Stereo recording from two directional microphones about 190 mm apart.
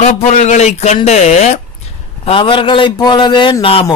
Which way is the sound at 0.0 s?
35° left (ahead or behind).